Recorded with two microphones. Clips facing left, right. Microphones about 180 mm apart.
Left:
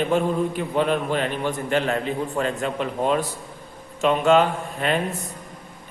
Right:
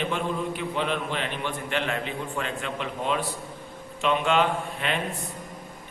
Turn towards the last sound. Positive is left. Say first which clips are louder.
# left 5 dB
turn(degrees=40)  # may be behind; listen again after turning